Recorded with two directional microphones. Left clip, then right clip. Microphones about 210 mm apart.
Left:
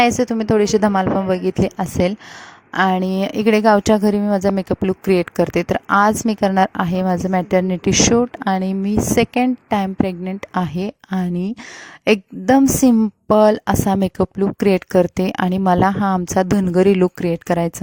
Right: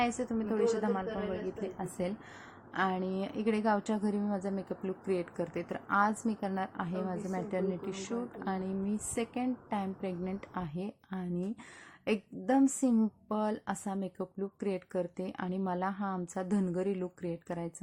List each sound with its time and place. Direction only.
0.0 s a woman's voice: 45° left (ahead or behind)